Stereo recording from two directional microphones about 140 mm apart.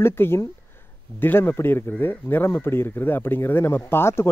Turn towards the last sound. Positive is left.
turn(degrees=15)  # may be behind; listen again after turning